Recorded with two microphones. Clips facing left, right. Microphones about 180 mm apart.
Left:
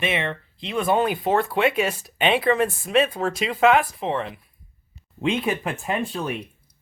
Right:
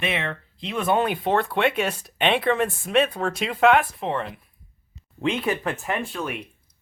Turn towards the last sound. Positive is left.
turn(degrees=20)  # may be behind; listen again after turning